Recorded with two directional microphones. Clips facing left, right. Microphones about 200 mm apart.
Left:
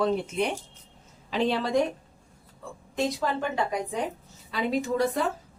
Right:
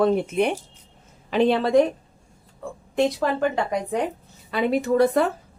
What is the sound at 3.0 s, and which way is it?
Speech, 60° right (ahead or behind).